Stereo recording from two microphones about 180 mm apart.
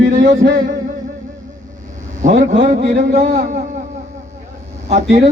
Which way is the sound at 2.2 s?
45° right (ahead or behind).